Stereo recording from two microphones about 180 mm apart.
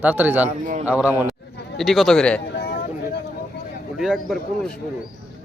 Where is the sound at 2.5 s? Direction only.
65° left (ahead or behind).